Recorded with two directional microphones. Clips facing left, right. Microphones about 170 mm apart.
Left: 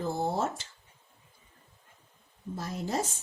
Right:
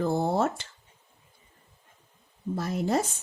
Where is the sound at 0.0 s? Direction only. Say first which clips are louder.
Right 5 dB; 65° right (ahead or behind).